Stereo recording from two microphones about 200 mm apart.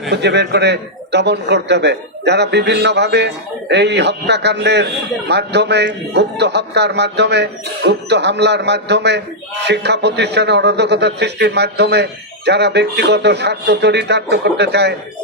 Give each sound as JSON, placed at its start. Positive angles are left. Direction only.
{"t": 0.1, "sound": "a man's voice", "side_deg": -60}